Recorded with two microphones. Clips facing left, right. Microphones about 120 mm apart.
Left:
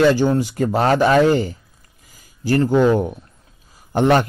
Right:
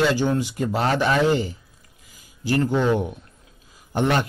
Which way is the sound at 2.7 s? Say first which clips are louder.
Left 6 dB; 40° left (ahead or behind).